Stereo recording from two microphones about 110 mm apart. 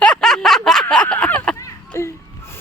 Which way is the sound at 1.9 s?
25° left (ahead or behind).